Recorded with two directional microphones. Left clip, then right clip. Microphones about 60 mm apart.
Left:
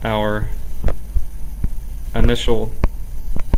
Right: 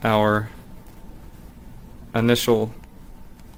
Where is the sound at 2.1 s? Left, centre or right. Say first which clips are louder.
Right 1 dB; right.